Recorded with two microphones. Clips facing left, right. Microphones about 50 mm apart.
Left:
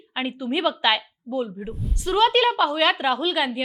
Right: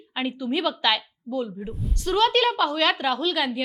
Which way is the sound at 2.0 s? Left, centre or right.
Centre.